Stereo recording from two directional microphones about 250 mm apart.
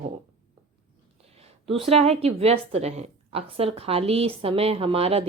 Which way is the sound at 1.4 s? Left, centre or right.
Right.